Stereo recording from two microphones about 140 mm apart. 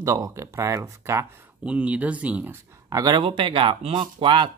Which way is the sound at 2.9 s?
25° right (ahead or behind).